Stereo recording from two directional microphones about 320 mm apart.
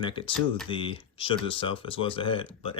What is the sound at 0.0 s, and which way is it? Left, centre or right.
Speech, centre.